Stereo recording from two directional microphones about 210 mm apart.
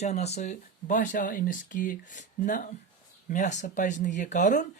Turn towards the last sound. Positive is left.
turn(degrees=35)  # may be behind; listen again after turning